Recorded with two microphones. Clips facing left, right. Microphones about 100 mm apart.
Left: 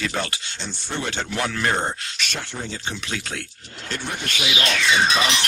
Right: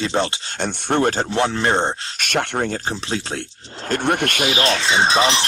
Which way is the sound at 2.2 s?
60° right (ahead or behind).